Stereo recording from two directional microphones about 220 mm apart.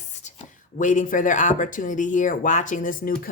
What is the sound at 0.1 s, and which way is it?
A woman's voice, 30° left (ahead or behind).